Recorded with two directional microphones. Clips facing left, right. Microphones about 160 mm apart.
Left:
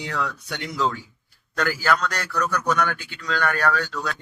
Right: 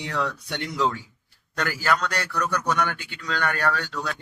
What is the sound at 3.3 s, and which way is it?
Speech, 25° right (ahead or behind).